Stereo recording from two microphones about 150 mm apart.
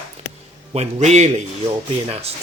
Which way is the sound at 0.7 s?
45° right (ahead or behind).